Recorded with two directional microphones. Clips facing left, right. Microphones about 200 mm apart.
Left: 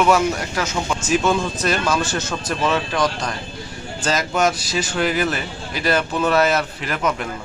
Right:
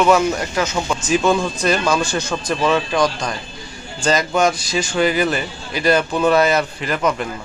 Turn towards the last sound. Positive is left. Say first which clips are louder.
# right 3 dB
turn(degrees=5)  # may be behind; listen again after turning